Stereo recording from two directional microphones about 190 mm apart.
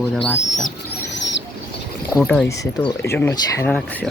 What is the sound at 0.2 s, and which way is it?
Speech, 35° left (ahead or behind).